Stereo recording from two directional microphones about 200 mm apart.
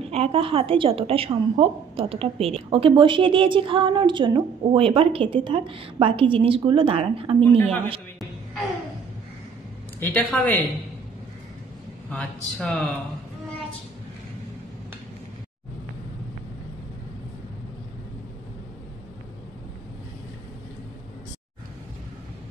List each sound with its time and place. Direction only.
0.1 s a woman's voice: 30° right (ahead or behind)
7.5 s a woman's voice: 10° left (ahead or behind)
9.9 s a woman's voice: 10° left (ahead or behind)
12.1 s speech: 5° left (ahead or behind)